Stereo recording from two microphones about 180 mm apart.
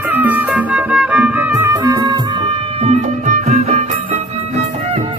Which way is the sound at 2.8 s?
40° right (ahead or behind).